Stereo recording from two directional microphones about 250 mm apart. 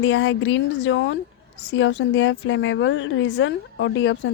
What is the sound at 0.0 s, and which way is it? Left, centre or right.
A woman's voice, left.